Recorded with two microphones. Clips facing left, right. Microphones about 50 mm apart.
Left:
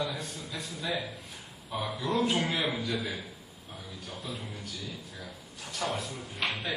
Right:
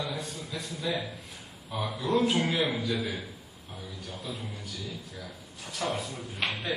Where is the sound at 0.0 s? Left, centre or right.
Centre.